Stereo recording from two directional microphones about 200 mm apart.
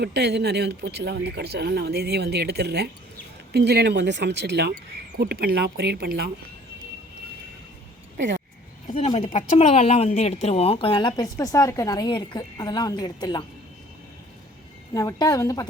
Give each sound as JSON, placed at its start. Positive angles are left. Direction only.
{"t": 0.0, "sound": "speech", "side_deg": -55}
{"t": 8.9, "sound": "a woman's voice", "side_deg": 30}
{"t": 14.9, "sound": "a woman's voice", "side_deg": 15}